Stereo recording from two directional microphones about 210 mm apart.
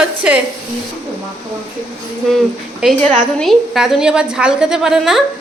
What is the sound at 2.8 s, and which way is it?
A woman's voice, 5° right (ahead or behind).